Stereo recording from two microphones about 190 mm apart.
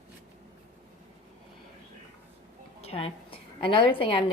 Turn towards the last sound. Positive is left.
turn(degrees=30)  # may be behind; listen again after turning